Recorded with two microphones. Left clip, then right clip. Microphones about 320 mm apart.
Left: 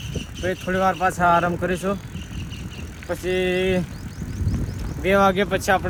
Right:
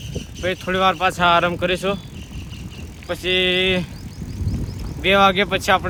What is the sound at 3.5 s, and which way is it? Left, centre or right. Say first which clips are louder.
Speech: right 2 dB; centre.